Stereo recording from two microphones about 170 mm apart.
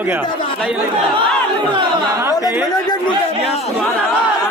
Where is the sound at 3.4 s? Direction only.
35° left (ahead or behind).